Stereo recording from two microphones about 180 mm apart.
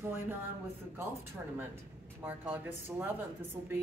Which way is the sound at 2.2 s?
10° right (ahead or behind).